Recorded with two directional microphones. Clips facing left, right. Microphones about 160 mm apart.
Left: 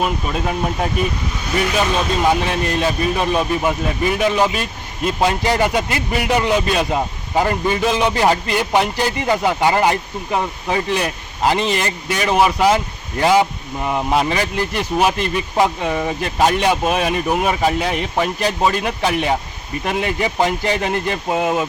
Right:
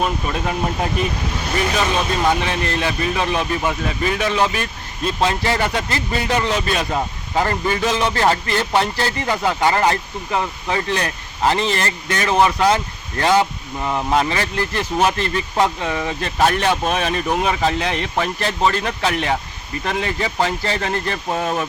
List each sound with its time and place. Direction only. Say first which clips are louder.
0.0 s speech: left 1 dB; 5° left (ahead or behind)
2.2 s speech: left 2 dB; 10° left (ahead or behind)